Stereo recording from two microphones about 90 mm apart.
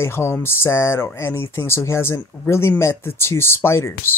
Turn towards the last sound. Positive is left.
turn(degrees=30)  # may be behind; listen again after turning